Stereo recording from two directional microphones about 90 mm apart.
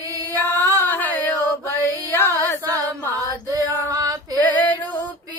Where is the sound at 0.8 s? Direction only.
20° left (ahead or behind).